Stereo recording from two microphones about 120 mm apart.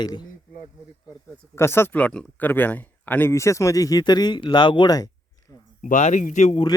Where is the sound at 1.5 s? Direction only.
20° left (ahead or behind).